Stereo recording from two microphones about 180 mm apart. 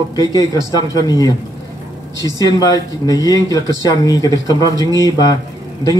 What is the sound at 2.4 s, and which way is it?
Speech, 20° left (ahead or behind).